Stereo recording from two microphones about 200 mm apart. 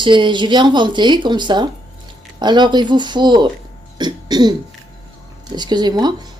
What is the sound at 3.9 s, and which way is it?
Cough, 20° right (ahead or behind).